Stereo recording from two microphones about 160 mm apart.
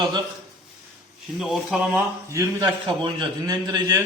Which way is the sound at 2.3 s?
20° right (ahead or behind).